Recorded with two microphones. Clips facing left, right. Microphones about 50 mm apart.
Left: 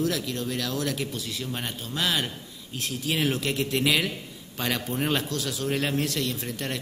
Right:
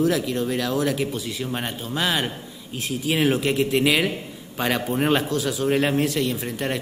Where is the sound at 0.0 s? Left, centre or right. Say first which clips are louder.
Right 6 dB; centre.